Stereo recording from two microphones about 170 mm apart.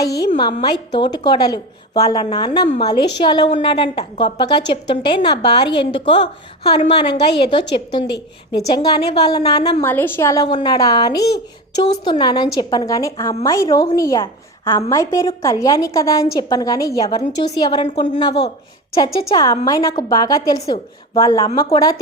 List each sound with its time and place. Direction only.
0.0 s a woman's voice: 20° left (ahead or behind)
9.8 s a woman's voice: 10° left (ahead or behind); by 17.9 s 30° left (ahead or behind)
18.9 s a woman's voice: 25° left (ahead or behind)